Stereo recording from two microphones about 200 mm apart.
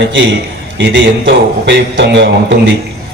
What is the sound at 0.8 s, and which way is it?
A man's voice, 60° right (ahead or behind).